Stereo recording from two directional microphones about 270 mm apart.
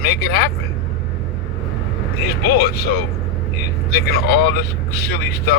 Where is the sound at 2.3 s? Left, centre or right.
Left.